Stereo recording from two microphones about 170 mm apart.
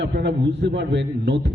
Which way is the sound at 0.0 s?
90° right.